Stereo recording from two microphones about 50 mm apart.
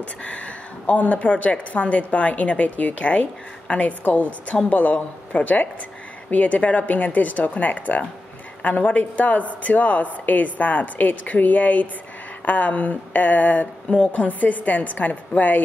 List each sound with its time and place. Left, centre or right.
0.2 s speech: left